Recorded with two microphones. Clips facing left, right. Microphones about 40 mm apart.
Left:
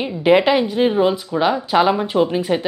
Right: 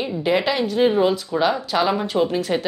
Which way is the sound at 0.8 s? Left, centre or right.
Centre.